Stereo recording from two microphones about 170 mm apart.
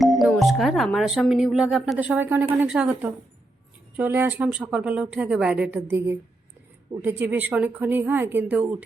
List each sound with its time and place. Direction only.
0.0 s speech: centre (ahead or behind)